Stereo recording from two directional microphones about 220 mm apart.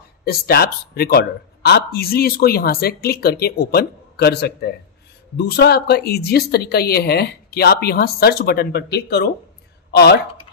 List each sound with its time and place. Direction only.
0.2 s speech: 45° left (ahead or behind)